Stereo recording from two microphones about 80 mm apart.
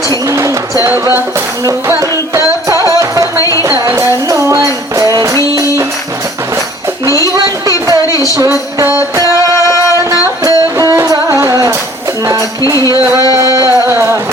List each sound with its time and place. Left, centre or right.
0.3 s a sound: right
1.6 s music: right
4.6 s music: right
8.0 s music: left
9.6 s music: left
10.4 s music: right